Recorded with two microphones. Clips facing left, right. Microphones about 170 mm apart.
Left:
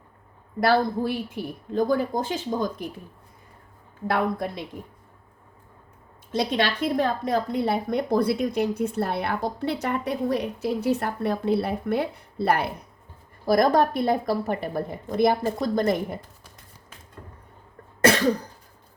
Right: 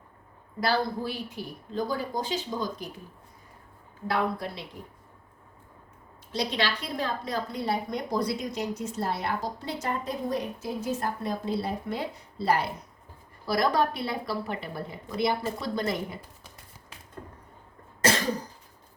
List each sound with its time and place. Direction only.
0.6 s a woman's voice: 50° left (ahead or behind)
4.0 s a woman's voice: 50° left (ahead or behind)
6.3 s a woman's voice: 50° left (ahead or behind)
13.4 s a woman's voice: 50° left (ahead or behind)